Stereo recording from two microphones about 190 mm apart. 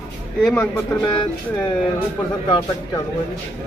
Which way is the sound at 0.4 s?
5° left (ahead or behind).